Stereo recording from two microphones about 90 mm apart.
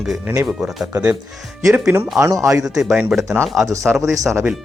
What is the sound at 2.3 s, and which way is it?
Speech, 40° right (ahead or behind).